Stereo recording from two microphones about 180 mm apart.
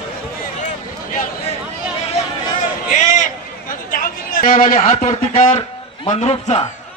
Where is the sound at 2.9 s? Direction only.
45° left (ahead or behind).